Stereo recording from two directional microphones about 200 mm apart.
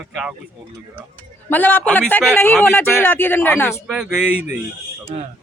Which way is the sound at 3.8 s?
5° right (ahead or behind).